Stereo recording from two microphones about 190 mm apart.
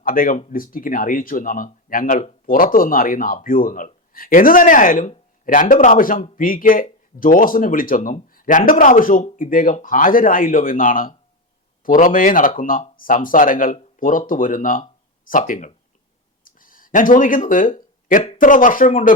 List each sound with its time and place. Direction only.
0.0 s speech: 50° left (ahead or behind)
16.4 s a sound: 45° left (ahead or behind)
17.7 s speech: 40° left (ahead or behind)